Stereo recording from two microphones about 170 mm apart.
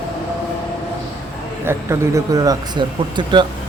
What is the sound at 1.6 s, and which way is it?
Speech, 15° right (ahead or behind).